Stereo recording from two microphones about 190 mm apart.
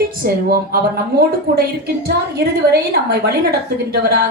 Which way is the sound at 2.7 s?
55° right (ahead or behind).